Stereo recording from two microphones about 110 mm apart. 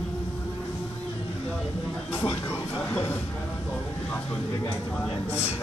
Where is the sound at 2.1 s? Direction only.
20° left (ahead or behind).